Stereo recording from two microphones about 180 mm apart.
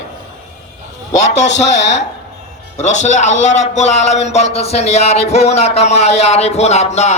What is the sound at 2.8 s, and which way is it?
A man's voice, 40° left (ahead or behind).